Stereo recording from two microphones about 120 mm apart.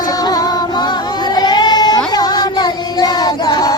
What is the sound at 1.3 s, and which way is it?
Child singing, 35° left (ahead or behind).